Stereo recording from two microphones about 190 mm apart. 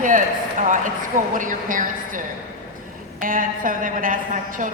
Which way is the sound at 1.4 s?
45° right (ahead or behind).